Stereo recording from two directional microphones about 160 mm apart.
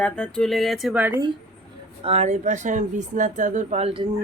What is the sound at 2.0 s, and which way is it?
Speech, 40° right (ahead or behind).